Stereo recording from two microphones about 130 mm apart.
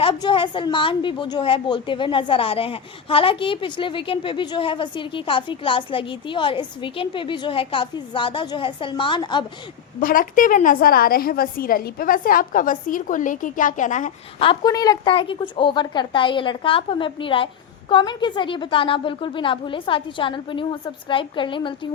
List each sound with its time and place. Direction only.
0.0 s a woman's voice: 40° left (ahead or behind)
10.0 s a woman's voice: 90° left; by 14.1 s 75° left (ahead or behind)
14.3 s speech: 45° left (ahead or behind)
14.6 s a woman's voice: 30° left (ahead or behind)
15.1 s a woman's voice: 40° left (ahead or behind)